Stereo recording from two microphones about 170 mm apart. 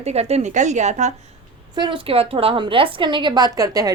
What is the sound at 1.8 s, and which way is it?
A woman's voice, 30° right (ahead or behind).